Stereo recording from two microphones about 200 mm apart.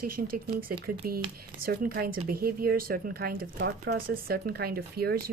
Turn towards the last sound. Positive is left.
turn(degrees=-50)  # may be behind; listen again after turning